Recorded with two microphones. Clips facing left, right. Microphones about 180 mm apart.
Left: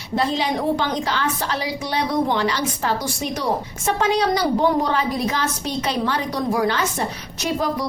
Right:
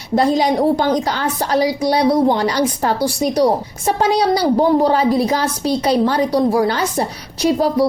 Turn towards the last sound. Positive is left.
turn(degrees=-35)  # may be behind; listen again after turning